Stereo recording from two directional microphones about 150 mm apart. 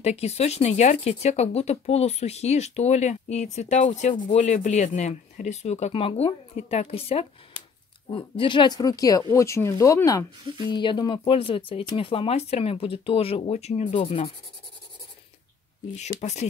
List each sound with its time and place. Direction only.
0.0 s speech: 45° left (ahead or behind)
16.2 s speech: 50° left (ahead or behind)